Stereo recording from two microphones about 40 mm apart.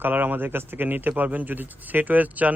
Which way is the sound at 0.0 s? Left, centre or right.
Right.